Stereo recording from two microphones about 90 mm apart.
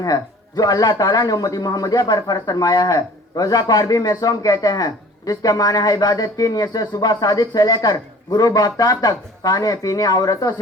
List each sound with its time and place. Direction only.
0.0 s speech: 45° left (ahead or behind)